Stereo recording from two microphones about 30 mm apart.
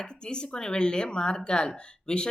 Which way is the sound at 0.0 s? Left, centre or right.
Left.